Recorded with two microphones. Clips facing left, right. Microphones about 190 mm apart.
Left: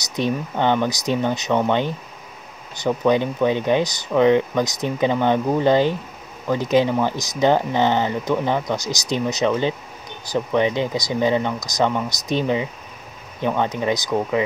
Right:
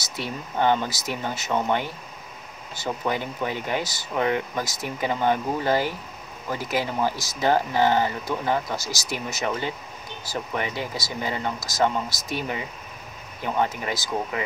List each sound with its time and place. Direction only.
0.0 s speech: 20° left (ahead or behind)